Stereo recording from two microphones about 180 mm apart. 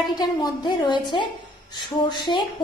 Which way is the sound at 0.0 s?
25° left (ahead or behind).